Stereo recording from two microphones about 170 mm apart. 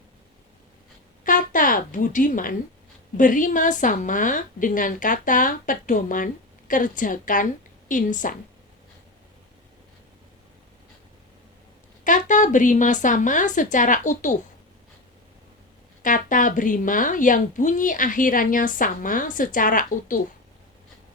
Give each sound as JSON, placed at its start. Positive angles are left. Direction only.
{"t": 1.2, "sound": "a woman's voice", "side_deg": 50}
{"t": 12.0, "sound": "a woman's voice", "side_deg": 50}
{"t": 16.0, "sound": "a woman's voice", "side_deg": 50}